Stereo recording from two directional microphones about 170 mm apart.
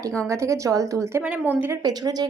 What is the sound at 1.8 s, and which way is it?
Speech, 25° right (ahead or behind).